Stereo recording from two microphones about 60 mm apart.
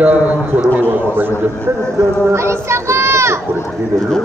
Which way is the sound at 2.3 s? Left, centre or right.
Right.